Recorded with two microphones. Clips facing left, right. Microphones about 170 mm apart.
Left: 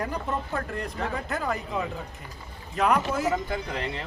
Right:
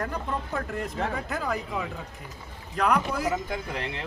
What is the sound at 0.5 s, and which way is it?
A man's voice, centre (ahead or behind).